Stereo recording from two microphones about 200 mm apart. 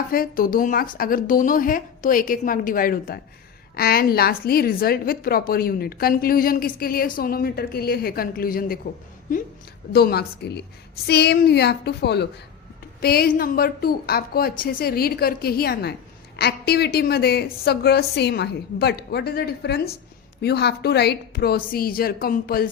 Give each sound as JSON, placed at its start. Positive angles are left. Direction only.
{"t": 0.1, "sound": "a woman's voice", "side_deg": 45}
{"t": 9.9, "sound": "a woman's voice", "side_deg": 50}